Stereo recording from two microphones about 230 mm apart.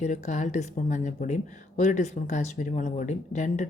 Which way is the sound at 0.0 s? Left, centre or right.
Left.